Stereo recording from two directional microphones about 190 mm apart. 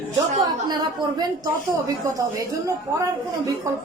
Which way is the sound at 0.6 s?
20° right (ahead or behind).